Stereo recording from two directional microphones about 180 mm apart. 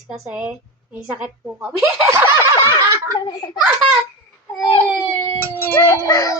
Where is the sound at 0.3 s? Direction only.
10° right (ahead or behind).